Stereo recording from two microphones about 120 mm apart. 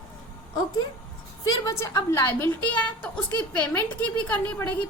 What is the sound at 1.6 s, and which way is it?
A woman's voice, 30° left (ahead or behind).